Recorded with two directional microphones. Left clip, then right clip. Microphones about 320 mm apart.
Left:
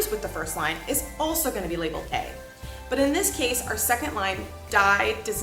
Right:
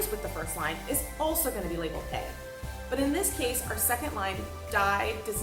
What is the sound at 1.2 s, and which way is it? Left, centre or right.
A woman's voice, centre.